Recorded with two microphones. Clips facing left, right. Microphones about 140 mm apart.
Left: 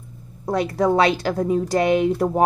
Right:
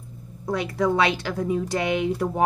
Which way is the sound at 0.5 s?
35° left (ahead or behind).